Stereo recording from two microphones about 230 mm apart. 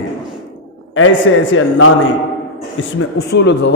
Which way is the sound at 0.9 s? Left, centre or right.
Left.